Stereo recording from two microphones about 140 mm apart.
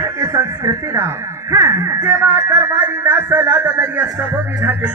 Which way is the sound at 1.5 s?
20° right (ahead or behind).